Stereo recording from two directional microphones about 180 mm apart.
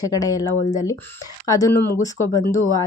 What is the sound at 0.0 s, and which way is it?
Speech, 20° left (ahead or behind).